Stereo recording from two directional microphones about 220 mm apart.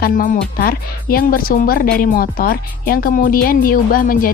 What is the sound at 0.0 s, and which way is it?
Speech, 40° left (ahead or behind).